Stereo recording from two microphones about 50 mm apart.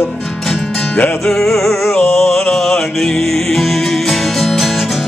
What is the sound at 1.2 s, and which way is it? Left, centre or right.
Speech, centre.